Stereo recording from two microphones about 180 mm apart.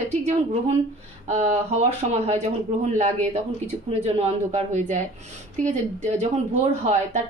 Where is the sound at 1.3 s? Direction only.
40° right (ahead or behind).